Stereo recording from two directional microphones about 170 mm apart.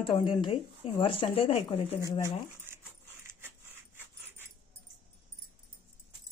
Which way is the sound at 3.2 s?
15° right (ahead or behind).